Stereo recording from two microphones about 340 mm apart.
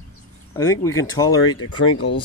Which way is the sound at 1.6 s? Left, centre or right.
Left.